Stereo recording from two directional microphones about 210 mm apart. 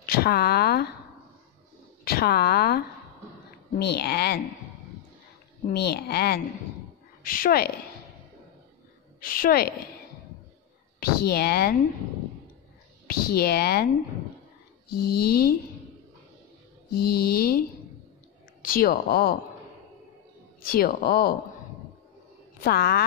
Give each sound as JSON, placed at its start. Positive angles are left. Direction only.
{"t": 0.0, "sound": "speech", "side_deg": 45}
{"t": 2.0, "sound": "speech", "side_deg": 50}
{"t": 3.8, "sound": "speech", "side_deg": 50}
{"t": 5.7, "sound": "speech", "side_deg": 50}
{"t": 9.2, "sound": "speech", "side_deg": 40}
{"t": 11.0, "sound": "speech", "side_deg": 45}
{"t": 13.0, "sound": "speech", "side_deg": 45}
{"t": 14.9, "sound": "speech", "side_deg": 45}
{"t": 16.9, "sound": "speech", "side_deg": 45}
{"t": 20.6, "sound": "speech", "side_deg": 45}
{"t": 22.6, "sound": "speech", "side_deg": 50}